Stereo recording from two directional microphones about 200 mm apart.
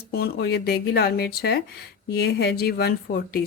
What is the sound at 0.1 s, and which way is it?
Speech, 55° left (ahead or behind).